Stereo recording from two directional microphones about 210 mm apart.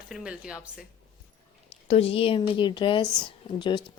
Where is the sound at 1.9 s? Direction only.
30° left (ahead or behind).